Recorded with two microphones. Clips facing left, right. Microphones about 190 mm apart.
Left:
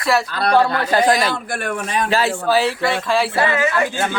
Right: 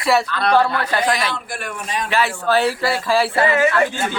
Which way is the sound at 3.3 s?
20° right (ahead or behind).